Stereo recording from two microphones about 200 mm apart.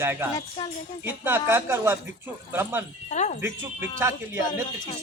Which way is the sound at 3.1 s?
35° left (ahead or behind).